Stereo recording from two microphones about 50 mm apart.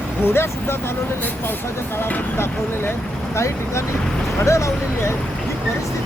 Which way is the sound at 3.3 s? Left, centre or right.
Left.